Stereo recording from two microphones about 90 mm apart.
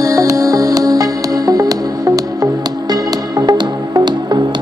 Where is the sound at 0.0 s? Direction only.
40° right (ahead or behind).